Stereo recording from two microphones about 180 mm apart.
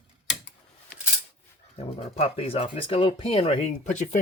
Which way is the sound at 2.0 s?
30° left (ahead or behind).